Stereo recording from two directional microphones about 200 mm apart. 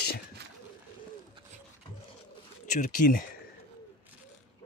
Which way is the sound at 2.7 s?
40° left (ahead or behind).